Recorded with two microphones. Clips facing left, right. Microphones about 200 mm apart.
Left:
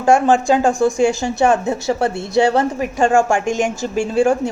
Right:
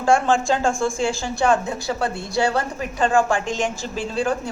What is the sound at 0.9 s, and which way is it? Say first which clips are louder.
A woman's voice: left 7 dB; 20° left (ahead or behind).